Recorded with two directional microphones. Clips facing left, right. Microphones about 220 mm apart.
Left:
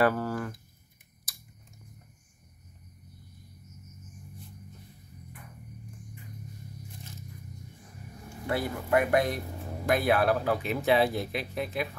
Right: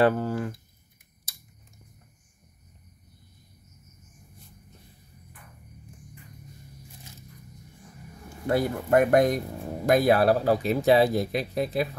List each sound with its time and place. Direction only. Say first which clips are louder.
0.0 s speech: right 3 dB; 20° right (ahead or behind)
1.3 s scissors: even; 25° right (ahead or behind)
8.5 s speech: right 5 dB; 45° right (ahead or behind)